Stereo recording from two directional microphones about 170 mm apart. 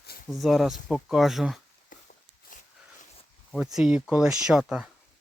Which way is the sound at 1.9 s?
50° left (ahead or behind).